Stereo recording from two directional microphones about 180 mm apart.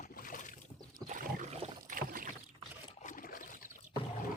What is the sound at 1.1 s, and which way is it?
Boat, 40° right (ahead or behind).